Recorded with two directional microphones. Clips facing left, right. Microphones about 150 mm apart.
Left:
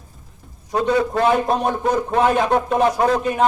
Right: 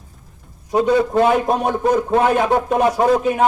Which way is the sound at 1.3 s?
5° right (ahead or behind).